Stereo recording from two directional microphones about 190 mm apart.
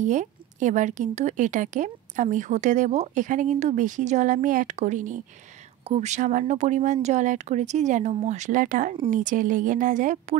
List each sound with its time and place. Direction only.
0.0 s a woman's voice: 40° right (ahead or behind)